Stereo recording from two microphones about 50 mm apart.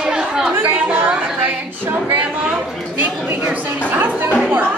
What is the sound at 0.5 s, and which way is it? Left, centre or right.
Chatter, right.